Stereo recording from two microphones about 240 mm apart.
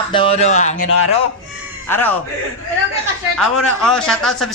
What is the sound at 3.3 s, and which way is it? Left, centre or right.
A woman's voice, centre.